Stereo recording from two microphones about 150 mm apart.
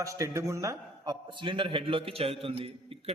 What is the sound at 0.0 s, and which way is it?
A man's voice, 20° right (ahead or behind).